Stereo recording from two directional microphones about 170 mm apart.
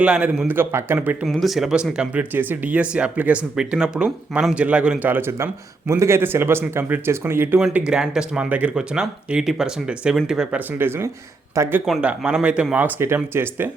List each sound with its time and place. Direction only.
0.0 s speech: 5° right (ahead or behind)
1.2 s speech: centre (ahead or behind)